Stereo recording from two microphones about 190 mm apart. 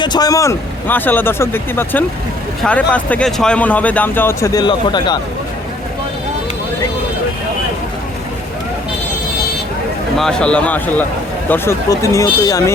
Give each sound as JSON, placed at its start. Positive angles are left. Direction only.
{"t": 0.0, "sound": "speech", "side_deg": 20}
{"t": 10.2, "sound": "speech", "side_deg": 5}